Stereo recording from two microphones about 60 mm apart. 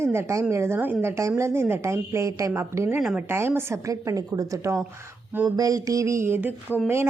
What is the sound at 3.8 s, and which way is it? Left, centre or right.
Speech, right.